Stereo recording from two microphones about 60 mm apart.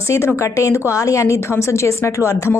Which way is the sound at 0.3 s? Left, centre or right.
Left.